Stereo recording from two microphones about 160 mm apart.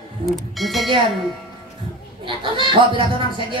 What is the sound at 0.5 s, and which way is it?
Speech, centre (ahead or behind).